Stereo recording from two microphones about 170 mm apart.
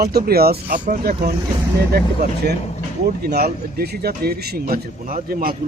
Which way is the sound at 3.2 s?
65° right (ahead or behind).